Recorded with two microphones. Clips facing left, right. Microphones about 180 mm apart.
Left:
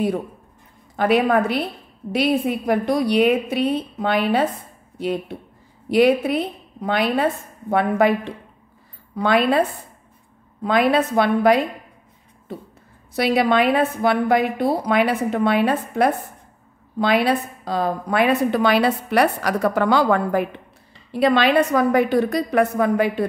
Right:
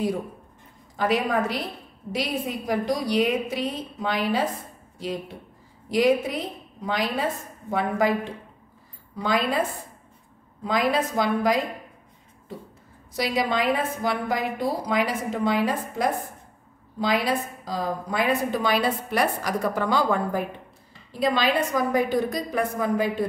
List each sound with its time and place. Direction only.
0.9 s a woman's voice: 65° left (ahead or behind)
13.1 s a woman's voice: 65° left (ahead or behind)